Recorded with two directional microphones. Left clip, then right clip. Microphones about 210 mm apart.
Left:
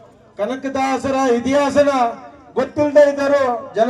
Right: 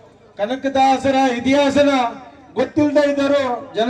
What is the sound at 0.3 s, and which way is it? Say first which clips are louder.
A man's voice: right 3 dB; 30° left (ahead or behind).